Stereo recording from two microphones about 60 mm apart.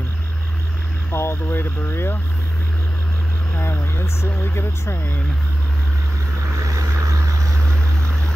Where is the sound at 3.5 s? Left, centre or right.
Left.